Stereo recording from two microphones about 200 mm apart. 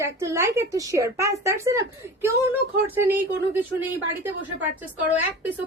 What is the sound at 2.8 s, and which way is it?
A woman's voice, 10° right (ahead or behind).